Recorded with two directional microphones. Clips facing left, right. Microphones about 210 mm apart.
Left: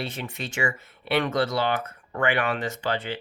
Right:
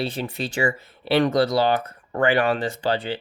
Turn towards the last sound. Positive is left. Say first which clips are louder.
# right 4 dB
turn(degrees=-35)  # may be behind; listen again after turning